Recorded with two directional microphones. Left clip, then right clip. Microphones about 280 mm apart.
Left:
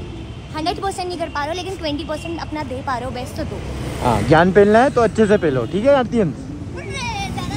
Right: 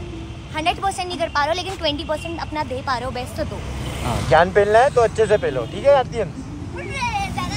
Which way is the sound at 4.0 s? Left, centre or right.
Left.